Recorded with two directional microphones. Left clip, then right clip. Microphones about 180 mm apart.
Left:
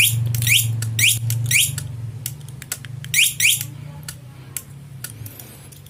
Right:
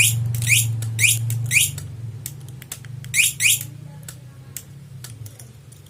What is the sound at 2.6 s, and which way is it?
Rodents, 5° left (ahead or behind).